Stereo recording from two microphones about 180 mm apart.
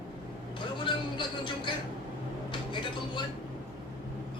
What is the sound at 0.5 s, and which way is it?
Vehicle, 25° left (ahead or behind).